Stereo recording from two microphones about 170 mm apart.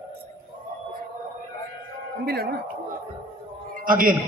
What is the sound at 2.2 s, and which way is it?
Speech, 65° right (ahead or behind).